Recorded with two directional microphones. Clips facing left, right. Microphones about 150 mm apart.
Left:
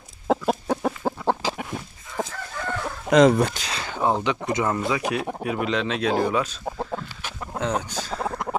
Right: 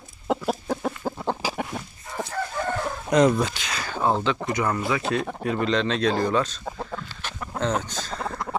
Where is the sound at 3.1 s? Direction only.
85° left.